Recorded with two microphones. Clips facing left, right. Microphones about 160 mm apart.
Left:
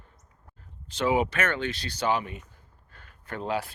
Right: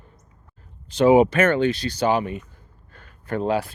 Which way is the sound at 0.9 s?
40° right (ahead or behind).